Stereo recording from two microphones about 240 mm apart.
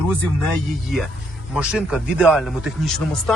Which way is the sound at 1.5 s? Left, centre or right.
Centre.